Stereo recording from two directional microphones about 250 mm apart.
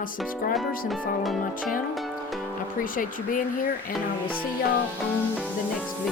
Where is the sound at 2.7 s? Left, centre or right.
Left.